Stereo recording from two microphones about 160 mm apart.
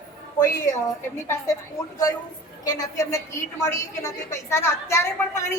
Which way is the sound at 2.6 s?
25° left (ahead or behind).